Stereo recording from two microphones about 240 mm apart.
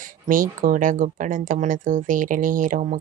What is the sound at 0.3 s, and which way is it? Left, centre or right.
Speech, right.